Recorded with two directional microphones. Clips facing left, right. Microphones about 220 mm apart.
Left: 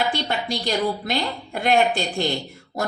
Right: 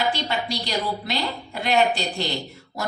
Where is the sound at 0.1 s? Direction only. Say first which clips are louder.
Left 1 dB; 50° left (ahead or behind).